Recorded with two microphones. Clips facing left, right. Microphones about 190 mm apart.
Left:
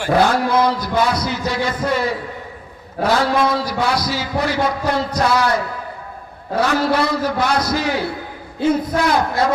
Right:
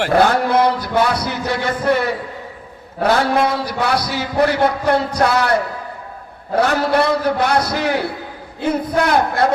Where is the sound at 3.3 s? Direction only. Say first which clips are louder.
Even; 60° right (ahead or behind).